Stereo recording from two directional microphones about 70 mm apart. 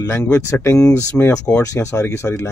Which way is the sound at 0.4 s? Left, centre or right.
Left.